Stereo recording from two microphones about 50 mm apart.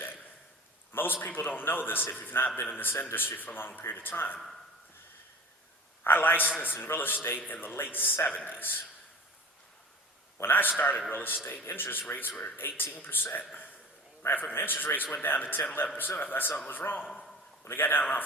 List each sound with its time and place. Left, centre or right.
0.9 s a man's voice: left
6.1 s a man's voice: left
10.5 s a man's voice: left